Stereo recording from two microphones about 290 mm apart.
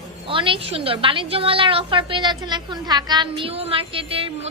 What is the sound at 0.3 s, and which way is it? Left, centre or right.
A woman's voice, centre.